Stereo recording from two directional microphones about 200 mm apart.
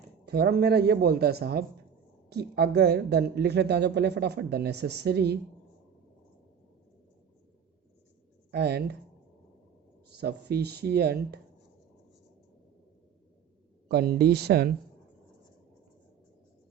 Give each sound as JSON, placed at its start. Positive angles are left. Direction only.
{"t": 0.3, "sound": "speech", "side_deg": -50}
{"t": 8.4, "sound": "speech", "side_deg": -55}
{"t": 10.2, "sound": "speech", "side_deg": -55}
{"t": 13.8, "sound": "speech", "side_deg": -50}